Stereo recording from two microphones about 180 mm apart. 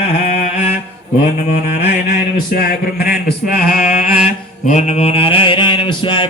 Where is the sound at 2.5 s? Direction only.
55° left (ahead or behind).